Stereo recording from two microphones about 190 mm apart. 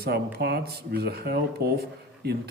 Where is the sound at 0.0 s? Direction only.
55° right (ahead or behind).